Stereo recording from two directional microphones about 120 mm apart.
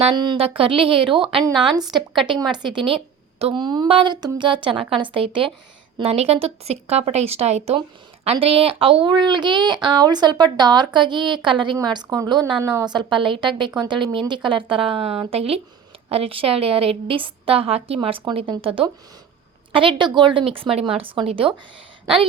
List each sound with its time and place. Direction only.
0.3 s a woman's voice: 50° right (ahead or behind)
2.7 s a sound: 50° right (ahead or behind)
3.5 s a woman's voice: 35° right (ahead or behind)